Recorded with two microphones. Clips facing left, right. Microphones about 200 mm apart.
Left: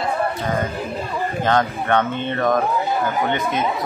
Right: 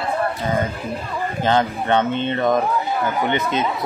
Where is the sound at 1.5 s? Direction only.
25° right (ahead or behind).